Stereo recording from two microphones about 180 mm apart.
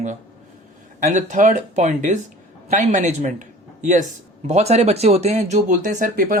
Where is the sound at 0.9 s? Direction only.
45° right (ahead or behind).